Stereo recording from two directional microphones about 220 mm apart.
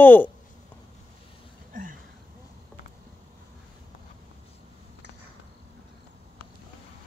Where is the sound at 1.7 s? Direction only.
35° right (ahead or behind).